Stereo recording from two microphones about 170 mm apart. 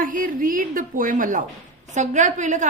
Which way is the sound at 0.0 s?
55° right (ahead or behind).